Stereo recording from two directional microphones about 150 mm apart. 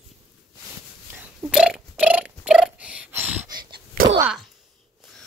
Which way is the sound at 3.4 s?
30° right (ahead or behind).